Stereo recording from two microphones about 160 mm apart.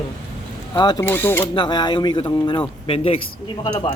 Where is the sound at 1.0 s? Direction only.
15° left (ahead or behind).